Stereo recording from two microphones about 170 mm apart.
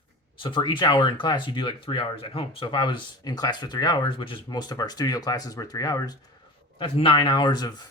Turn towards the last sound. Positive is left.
turn(degrees=25)  # may be behind; listen again after turning